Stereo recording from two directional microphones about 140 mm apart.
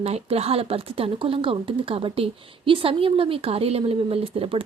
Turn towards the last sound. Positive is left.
turn(degrees=-40)  # may be behind; listen again after turning